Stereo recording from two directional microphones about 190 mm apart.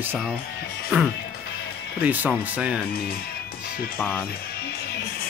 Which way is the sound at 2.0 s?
10° right (ahead or behind).